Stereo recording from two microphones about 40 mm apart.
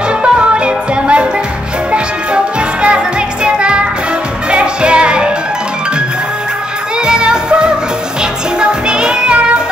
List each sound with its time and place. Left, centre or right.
0.2 s music: right
7.1 s music: right